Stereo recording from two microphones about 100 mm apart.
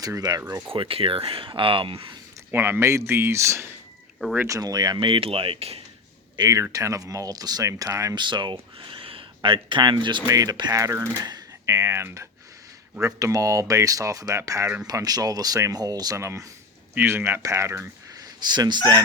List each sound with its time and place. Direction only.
0.0 s speech: 40° right (ahead or behind)
0.7 s speech: 65° right (ahead or behind)
2.5 s speech: 20° right (ahead or behind); by 4.9 s 40° right (ahead or behind)
4.9 s speech: 60° right (ahead or behind); by 5.8 s 90° right
6.3 s speech: 45° right (ahead or behind)
6.6 s speech: 30° right (ahead or behind)
8.1 s speech: 50° right (ahead or behind)
8.8 s a sound: 60° right (ahead or behind)
10.2 s speech: 35° right (ahead or behind)
16.9 s speech: 20° right (ahead or behind)
18.4 s speech: 45° right (ahead or behind)